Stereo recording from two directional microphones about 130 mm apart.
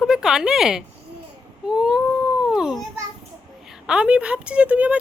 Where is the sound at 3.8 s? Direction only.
5° right (ahead or behind).